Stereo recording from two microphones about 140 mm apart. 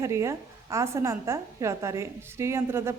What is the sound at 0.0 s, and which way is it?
A woman's voice, 20° right (ahead or behind).